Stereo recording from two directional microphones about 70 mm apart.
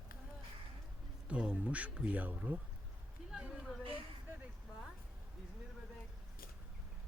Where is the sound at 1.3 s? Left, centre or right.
Centre.